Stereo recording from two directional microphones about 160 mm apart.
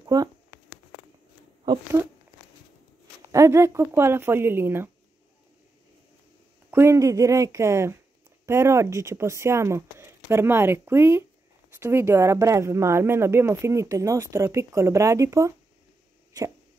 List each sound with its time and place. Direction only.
0.0 s speech: 25° right (ahead or behind)
3.3 s speech: 15° right (ahead or behind)
6.7 s speech: 15° right (ahead or behind)